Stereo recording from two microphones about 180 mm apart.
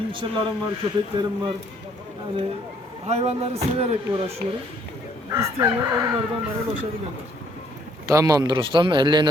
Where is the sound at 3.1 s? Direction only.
35° right (ahead or behind).